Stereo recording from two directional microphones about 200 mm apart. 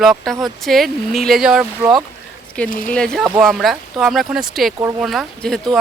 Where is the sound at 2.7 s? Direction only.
45° left (ahead or behind).